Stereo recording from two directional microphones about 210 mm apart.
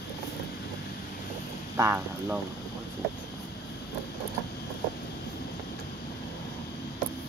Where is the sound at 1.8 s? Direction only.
10° right (ahead or behind).